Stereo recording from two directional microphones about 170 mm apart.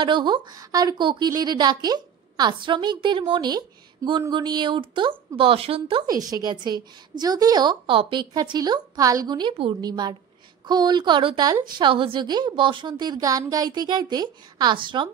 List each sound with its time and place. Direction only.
0.0 s a woman's voice: 25° right (ahead or behind)